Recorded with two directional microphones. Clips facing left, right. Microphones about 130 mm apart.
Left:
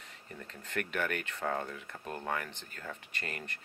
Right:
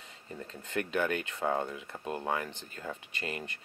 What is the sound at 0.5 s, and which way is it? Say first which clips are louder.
Speech: right 3 dB; 25° right (ahead or behind).